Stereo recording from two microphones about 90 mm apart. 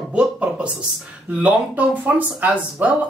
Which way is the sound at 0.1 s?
10° right (ahead or behind).